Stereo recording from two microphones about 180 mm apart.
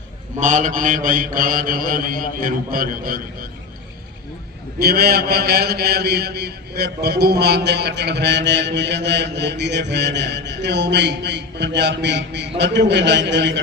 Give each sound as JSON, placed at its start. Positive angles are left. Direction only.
{"t": 0.3, "sound": "mantra", "side_deg": -45}
{"t": 4.8, "sound": "a man's voice", "side_deg": -60}